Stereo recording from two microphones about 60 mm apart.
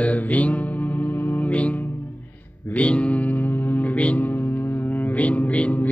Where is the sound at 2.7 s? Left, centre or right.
Left.